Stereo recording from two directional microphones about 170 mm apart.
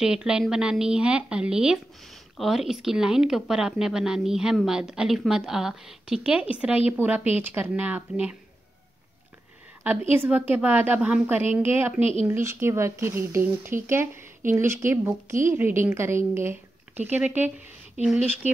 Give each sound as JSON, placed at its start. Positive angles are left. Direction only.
{"t": 0.0, "sound": "a woman's voice", "side_deg": -5}
{"t": 9.8, "sound": "a woman's voice", "side_deg": -10}